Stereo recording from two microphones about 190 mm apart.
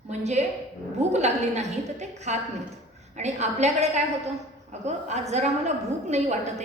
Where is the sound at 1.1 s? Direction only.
35° right (ahead or behind).